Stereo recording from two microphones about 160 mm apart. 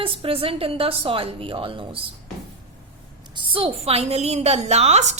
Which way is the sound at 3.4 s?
30° right (ahead or behind).